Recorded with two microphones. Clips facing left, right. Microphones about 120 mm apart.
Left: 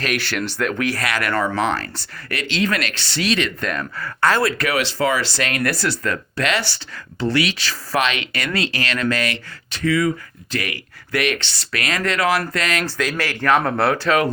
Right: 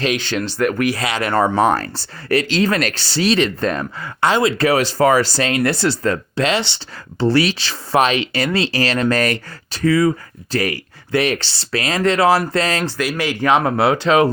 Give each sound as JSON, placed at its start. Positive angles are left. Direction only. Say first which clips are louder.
{"t": 0.2, "sound": "speech", "louder": "right 4 dB", "side_deg": -20}
{"t": 0.9, "sound": "speech", "louder": "right 2 dB", "side_deg": -25}
{"t": 1.5, "sound": "speech", "louder": "right 5 dB", "side_deg": -40}
{"t": 4.0, "sound": "speech", "louder": "right 2 dB", "side_deg": -20}
{"t": 5.5, "sound": "speech", "louder": "right 4 dB", "side_deg": -25}
{"t": 13.0, "sound": "speech", "louder": "right 3 dB", "side_deg": -10}